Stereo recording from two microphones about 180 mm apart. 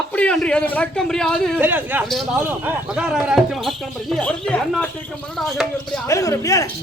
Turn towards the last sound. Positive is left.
turn(degrees=20)  # may be behind; listen again after turning